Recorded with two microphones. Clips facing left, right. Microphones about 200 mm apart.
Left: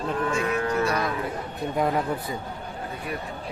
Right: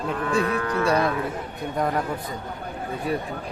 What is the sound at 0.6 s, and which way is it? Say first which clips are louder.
Speech: left 1 dB; 25° left (ahead or behind).